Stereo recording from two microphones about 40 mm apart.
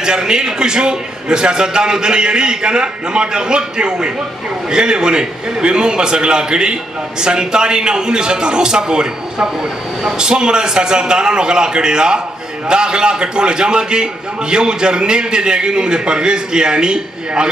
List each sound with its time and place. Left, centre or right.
0.0 s a man's voice: centre